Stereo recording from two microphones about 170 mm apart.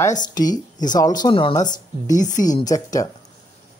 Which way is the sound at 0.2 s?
25° left (ahead or behind).